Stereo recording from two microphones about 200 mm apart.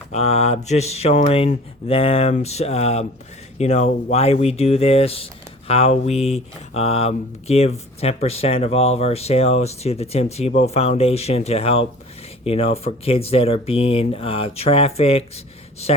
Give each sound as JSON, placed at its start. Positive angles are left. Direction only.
{"t": 0.1, "sound": "speech", "side_deg": 35}